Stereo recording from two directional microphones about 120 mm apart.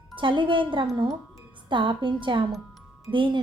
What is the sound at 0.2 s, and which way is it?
Speech, 45° right (ahead or behind).